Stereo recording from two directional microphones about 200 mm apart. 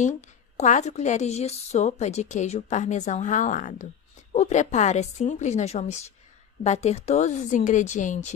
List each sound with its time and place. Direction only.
0.6 s a woman's voice: 35° left (ahead or behind)